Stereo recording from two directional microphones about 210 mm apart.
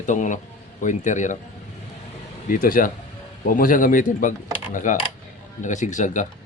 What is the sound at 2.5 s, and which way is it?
Speech, 40° left (ahead or behind).